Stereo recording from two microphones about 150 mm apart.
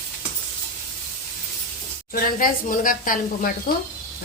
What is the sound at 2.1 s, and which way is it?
Speech, 70° left (ahead or behind).